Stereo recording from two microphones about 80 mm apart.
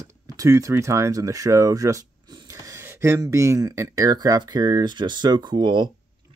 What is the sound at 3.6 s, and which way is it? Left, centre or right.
Speech, right.